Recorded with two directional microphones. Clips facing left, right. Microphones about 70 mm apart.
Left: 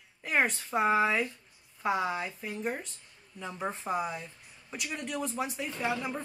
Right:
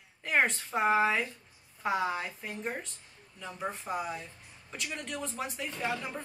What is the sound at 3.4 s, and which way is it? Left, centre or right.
A woman's voice, centre.